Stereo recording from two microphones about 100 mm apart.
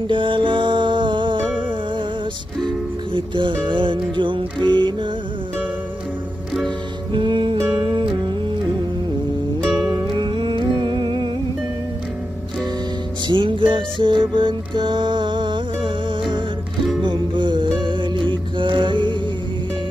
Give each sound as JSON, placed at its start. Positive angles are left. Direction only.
{"t": 0.1, "sound": "music", "side_deg": -55}
{"t": 3.1, "sound": "music", "side_deg": -55}
{"t": 7.1, "sound": "music", "side_deg": -55}
{"t": 9.6, "sound": "music", "side_deg": -5}
{"t": 10.1, "sound": "music", "side_deg": -55}
{"t": 13.3, "sound": "music", "side_deg": -55}